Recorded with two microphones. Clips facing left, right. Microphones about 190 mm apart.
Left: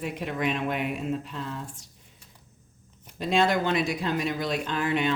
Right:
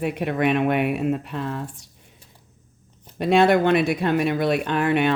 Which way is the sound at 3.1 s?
65° right (ahead or behind).